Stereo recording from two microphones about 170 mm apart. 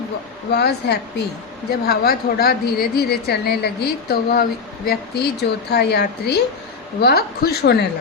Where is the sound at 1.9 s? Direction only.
65° left (ahead or behind).